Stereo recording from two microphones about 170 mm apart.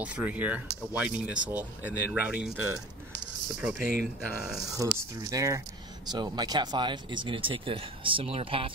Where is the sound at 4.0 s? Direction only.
5° right (ahead or behind).